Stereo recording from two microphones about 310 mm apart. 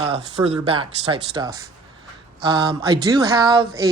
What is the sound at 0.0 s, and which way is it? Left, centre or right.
Speech, centre.